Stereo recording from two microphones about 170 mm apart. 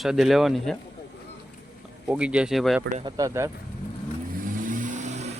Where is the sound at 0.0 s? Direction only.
Centre (ahead or behind).